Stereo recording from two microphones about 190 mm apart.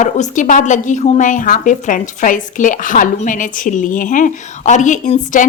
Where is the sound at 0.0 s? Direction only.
40° left (ahead or behind).